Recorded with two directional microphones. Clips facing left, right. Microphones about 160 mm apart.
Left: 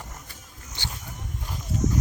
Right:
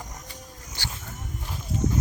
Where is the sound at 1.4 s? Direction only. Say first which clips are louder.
Left 1 dB; 5° right (ahead or behind).